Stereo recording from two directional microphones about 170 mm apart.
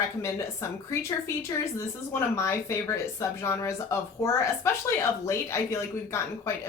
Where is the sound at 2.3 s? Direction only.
15° left (ahead or behind).